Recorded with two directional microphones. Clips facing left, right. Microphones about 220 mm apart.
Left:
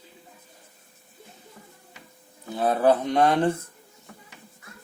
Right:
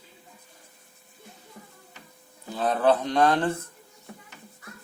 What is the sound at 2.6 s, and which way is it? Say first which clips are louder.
Speech: left 2 dB; 10° left (ahead or behind).